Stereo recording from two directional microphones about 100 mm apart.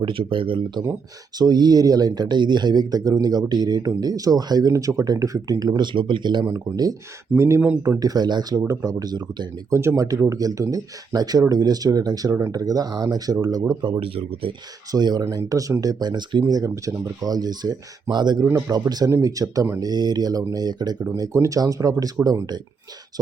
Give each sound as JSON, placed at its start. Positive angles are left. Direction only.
{"t": 0.0, "sound": "speech", "side_deg": -60}
{"t": 1.4, "sound": "speech", "side_deg": -45}
{"t": 6.4, "sound": "speech", "side_deg": -35}
{"t": 9.7, "sound": "speech", "side_deg": -30}
{"t": 13.8, "sound": "speech", "side_deg": -60}
{"t": 14.9, "sound": "speech", "side_deg": -45}
{"t": 16.5, "sound": "speech", "side_deg": -35}
{"t": 18.4, "sound": "speech", "side_deg": -35}
{"t": 21.2, "sound": "speech", "side_deg": -35}